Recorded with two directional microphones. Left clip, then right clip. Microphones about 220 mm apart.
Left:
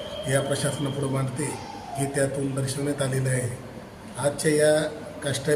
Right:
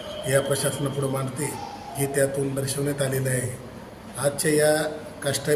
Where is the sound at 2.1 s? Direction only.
10° right (ahead or behind).